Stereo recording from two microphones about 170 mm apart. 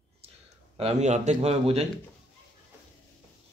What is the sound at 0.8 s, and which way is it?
Speech, 45° right (ahead or behind).